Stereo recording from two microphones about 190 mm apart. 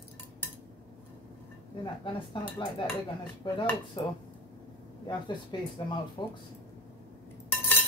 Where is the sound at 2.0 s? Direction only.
25° left (ahead or behind).